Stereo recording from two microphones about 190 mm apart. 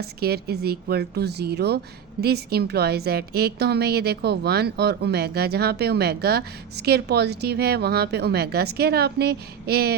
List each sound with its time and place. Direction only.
0.0 s a woman's voice: 55° right (ahead or behind)